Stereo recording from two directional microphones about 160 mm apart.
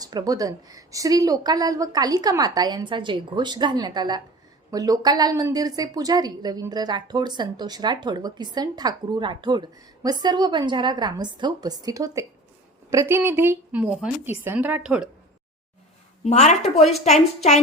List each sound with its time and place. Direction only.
0.0 s a woman's voice: 25° right (ahead or behind); by 15.1 s 5° right (ahead or behind)
16.2 s a woman's voice: 45° left (ahead or behind)